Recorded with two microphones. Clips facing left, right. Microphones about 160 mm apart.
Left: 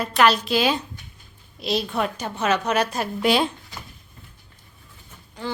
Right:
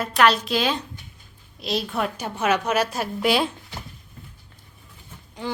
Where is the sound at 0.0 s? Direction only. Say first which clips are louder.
Even; centre (ahead or behind).